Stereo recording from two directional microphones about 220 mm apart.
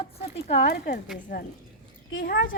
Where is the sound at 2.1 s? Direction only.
55° left (ahead or behind).